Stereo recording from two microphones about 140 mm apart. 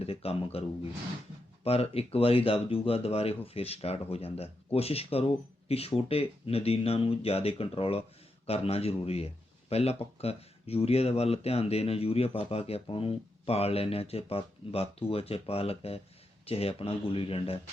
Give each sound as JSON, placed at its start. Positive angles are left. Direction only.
{"t": 0.0, "sound": "speech", "side_deg": 45}
{"t": 1.6, "sound": "speech", "side_deg": 45}